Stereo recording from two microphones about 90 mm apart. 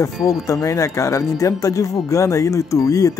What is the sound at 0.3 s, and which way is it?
Speech, 40° left (ahead or behind).